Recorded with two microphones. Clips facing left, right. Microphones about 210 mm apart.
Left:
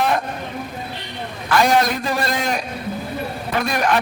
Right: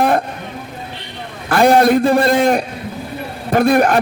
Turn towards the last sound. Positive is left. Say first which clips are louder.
# right 7 dB
turn(degrees=-50)  # may be behind; listen again after turning